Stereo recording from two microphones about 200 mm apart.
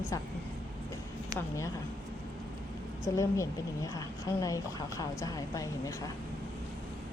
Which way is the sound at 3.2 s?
15° left (ahead or behind).